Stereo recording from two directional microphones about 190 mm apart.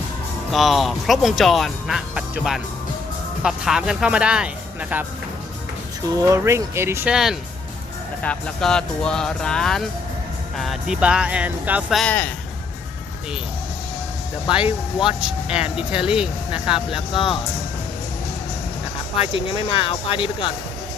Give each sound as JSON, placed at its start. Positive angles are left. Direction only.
{"t": 0.5, "sound": "speech", "side_deg": 0}
{"t": 6.1, "sound": "speech", "side_deg": -15}
{"t": 14.9, "sound": "speech", "side_deg": -5}
{"t": 19.2, "sound": "speech", "side_deg": 30}